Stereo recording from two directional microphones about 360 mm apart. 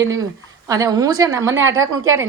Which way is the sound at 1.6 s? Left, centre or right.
Right.